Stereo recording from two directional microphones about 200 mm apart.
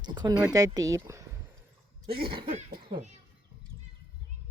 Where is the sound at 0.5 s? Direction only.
20° right (ahead or behind).